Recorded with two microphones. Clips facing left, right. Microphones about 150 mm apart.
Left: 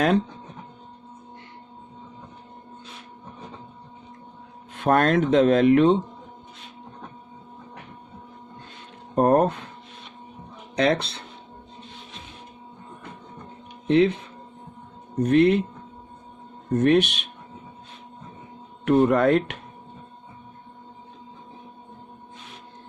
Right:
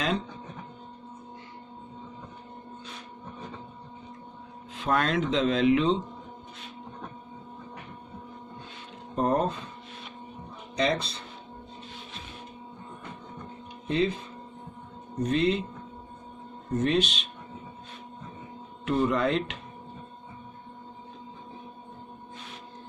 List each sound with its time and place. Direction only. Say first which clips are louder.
4.7 s speech: left 7 dB; 55° left (ahead or behind)
9.1 s speech: left 7 dB; 60° left (ahead or behind)
10.8 s speech: left 5 dB; 65° left (ahead or behind)
13.8 s speech: left 8 dB; 70° left (ahead or behind)
16.7 s speech: left 7 dB; 60° left (ahead or behind)
18.9 s speech: left 7 dB; 55° left (ahead or behind)